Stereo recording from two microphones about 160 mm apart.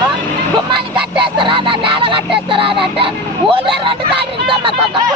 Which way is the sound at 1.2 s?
30° right (ahead or behind).